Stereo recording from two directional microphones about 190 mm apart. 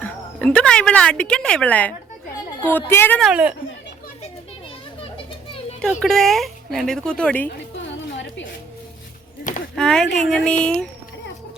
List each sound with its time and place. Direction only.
0.0 s a woman's voice: 5° left (ahead or behind)
3.2 s speech: 5° right (ahead or behind)
5.1 s children playing: 30° left (ahead or behind)
6.0 s speech: centre (ahead or behind)
9.4 s a sound: 45° left (ahead or behind)
9.7 s speech: 5° left (ahead or behind)